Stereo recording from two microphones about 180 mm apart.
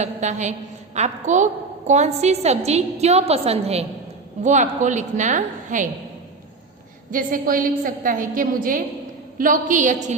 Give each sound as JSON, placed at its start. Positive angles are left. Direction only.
{"t": 0.0, "sound": "a woman's voice", "side_deg": -40}
{"t": 7.1, "sound": "a woman's voice", "side_deg": -50}